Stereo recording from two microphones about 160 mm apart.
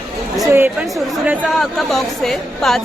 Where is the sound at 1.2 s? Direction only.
10° right (ahead or behind).